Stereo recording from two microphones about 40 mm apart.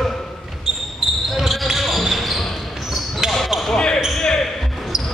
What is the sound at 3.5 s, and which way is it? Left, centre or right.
Basketball bounce, right.